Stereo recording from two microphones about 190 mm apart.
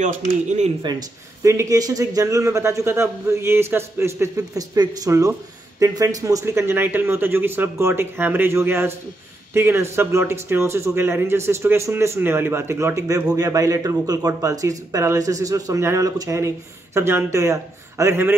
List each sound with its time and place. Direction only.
0.8 s speech: 20° right (ahead or behind)